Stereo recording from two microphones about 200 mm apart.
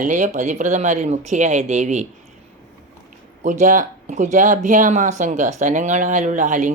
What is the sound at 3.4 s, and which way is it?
Speech, 40° right (ahead or behind).